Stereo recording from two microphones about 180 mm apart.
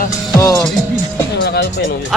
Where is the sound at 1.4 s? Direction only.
75° left (ahead or behind).